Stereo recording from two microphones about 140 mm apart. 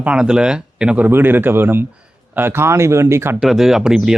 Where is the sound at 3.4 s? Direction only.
5° right (ahead or behind).